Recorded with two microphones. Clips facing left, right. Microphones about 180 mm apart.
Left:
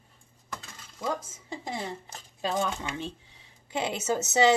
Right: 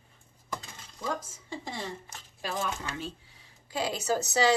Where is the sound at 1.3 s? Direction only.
25° left (ahead or behind).